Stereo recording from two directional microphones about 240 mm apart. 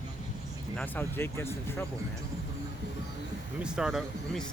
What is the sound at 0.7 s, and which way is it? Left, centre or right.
Speech, centre.